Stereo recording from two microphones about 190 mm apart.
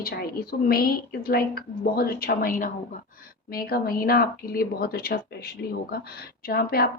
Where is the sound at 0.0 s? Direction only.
50° left (ahead or behind).